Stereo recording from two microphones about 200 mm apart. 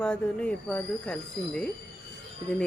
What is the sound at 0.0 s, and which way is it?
Speech, 5° left (ahead or behind).